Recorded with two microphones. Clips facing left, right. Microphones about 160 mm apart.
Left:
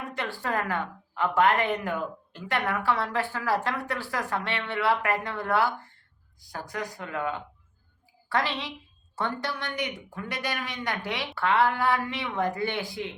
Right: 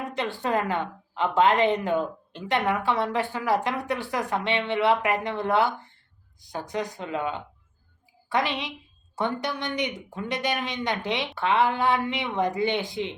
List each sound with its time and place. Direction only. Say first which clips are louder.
0.1 s a woman's voice: right 4 dB; 20° right (ahead or behind)